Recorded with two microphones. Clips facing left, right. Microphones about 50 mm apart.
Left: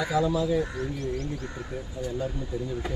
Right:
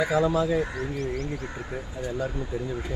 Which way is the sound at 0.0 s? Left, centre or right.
Right.